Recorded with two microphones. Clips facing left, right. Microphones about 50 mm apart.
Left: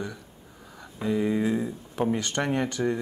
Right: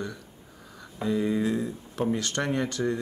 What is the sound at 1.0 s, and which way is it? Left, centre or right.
Speech, centre.